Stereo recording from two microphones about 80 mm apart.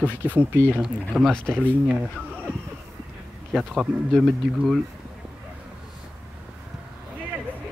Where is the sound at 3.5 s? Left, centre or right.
Centre.